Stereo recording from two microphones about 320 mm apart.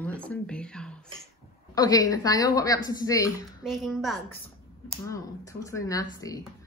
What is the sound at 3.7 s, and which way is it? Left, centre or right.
Speech, centre.